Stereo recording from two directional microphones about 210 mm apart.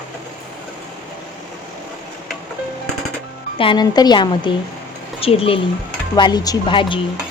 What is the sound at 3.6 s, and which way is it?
Speech, 20° left (ahead or behind).